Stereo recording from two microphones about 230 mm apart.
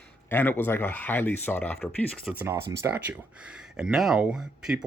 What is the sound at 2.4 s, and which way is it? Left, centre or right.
Speech, centre.